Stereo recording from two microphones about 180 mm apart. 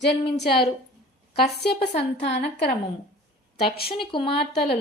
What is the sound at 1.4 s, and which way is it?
A woman's voice, 65° left (ahead or behind).